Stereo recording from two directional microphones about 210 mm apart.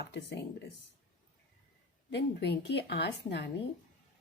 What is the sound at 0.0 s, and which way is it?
Speech, 55° left (ahead or behind).